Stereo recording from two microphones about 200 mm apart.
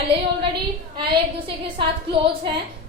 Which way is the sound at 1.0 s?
25° right (ahead or behind).